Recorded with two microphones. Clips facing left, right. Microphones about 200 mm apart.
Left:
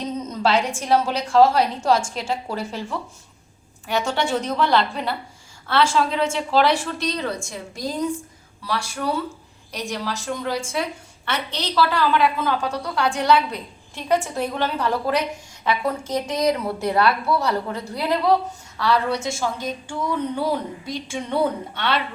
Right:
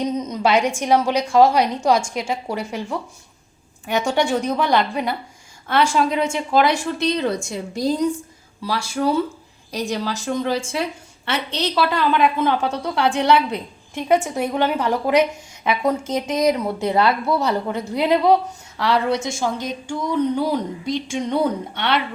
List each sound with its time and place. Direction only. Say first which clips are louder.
0.0 s a sound: right 3 dB; 15° right (ahead or behind)
0.8 s a woman's voice: right 3 dB; 15° right (ahead or behind)
3.8 s a woman's voice: right 3 dB; 15° right (ahead or behind)
9.8 s a woman's voice: right 3 dB; 25° right (ahead or behind)